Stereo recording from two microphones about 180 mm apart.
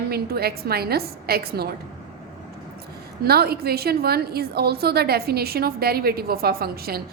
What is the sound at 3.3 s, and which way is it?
A woman's voice, 60° right (ahead or behind).